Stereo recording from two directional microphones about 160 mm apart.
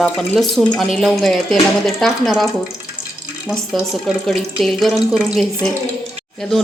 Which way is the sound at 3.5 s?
Centre (ahead or behind).